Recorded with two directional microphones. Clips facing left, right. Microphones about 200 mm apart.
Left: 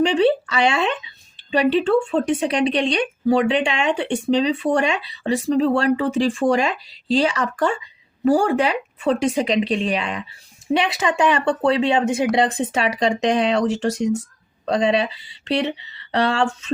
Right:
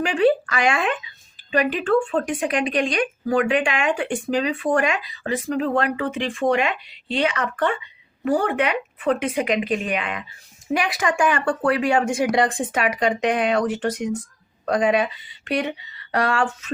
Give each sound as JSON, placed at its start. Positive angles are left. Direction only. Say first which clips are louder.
{"t": 0.3, "sound": "speech", "louder": "even", "side_deg": 25}